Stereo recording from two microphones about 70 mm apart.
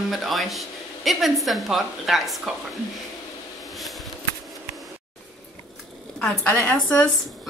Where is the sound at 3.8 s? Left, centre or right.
Centre.